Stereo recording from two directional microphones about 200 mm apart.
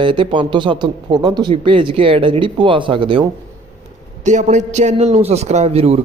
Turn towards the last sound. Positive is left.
turn(degrees=-30)  # may be behind; listen again after turning